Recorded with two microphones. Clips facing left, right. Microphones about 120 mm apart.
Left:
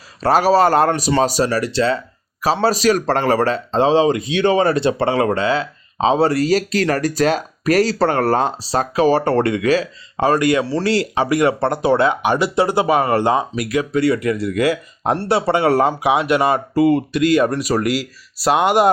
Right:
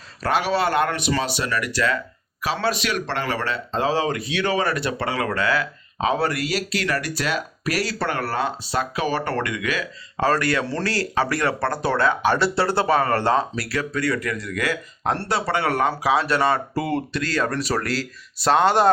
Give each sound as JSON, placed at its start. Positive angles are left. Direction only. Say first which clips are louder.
{"t": 0.2, "sound": "speech", "louder": "left 8 dB", "side_deg": 40}
{"t": 10.2, "sound": "speech", "louder": "left 5 dB", "side_deg": 20}